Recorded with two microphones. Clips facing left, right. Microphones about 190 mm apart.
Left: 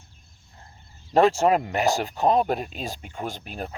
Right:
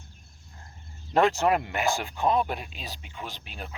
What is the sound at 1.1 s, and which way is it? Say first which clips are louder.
Speech: left 4 dB; 35° left (ahead or behind).